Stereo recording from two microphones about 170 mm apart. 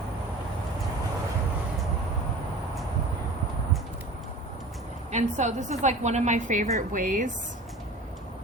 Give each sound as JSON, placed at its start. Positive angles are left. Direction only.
{"t": 5.1, "sound": "a woman's voice", "side_deg": -45}